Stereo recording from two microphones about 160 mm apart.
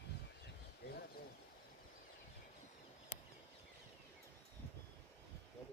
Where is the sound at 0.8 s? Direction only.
90° left.